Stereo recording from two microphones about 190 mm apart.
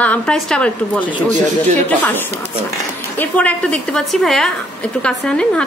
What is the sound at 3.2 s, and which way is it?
A woman's voice, 5° left (ahead or behind).